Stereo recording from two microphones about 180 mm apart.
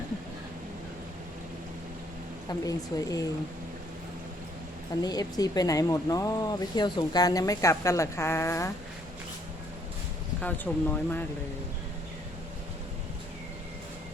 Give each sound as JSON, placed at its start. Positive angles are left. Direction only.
{"t": 2.5, "sound": "speech", "side_deg": 20}
{"t": 5.0, "sound": "speech", "side_deg": 20}
{"t": 10.4, "sound": "speech", "side_deg": 10}